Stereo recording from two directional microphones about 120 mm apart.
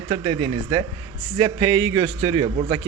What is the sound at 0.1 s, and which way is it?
Speech, 45° right (ahead or behind).